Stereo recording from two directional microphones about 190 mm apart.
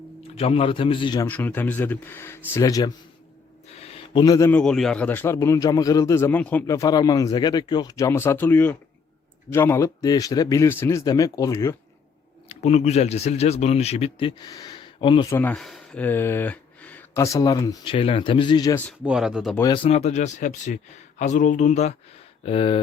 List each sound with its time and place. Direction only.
0.2 s a man's voice: 30° left (ahead or behind)
1.3 s a man's voice: 10° left (ahead or behind)
3.8 s a sound: 30° left (ahead or behind); by 4.6 s 15° left (ahead or behind)
4.6 s speech: 5° left (ahead or behind)
12.5 s speech: 35° left (ahead or behind)
15.4 s speech: 5° left (ahead or behind)
19.0 s speech: 5° right (ahead or behind)
19.5 s a man's voice: 25° left (ahead or behind)